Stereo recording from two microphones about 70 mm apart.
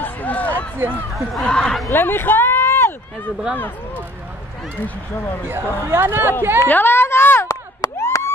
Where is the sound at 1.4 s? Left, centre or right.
Centre.